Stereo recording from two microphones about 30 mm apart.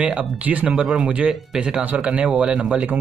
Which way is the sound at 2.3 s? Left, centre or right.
Right.